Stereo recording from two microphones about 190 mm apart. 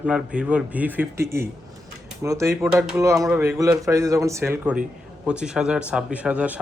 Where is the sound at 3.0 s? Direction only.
15° right (ahead or behind).